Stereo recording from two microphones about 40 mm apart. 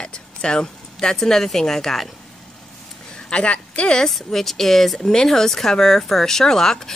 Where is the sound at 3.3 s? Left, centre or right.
Left.